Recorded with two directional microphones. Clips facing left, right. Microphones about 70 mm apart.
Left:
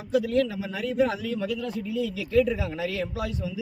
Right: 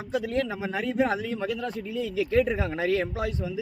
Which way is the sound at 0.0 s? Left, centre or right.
Right.